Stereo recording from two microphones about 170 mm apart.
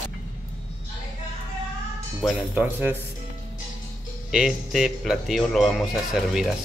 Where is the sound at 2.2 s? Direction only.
Centre (ahead or behind).